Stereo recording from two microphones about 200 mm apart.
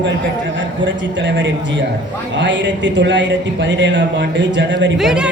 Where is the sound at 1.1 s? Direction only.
65° right (ahead or behind).